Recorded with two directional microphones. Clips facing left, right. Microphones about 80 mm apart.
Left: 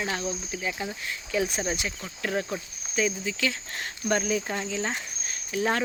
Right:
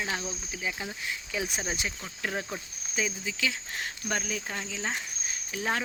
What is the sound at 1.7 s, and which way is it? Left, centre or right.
Speech, right.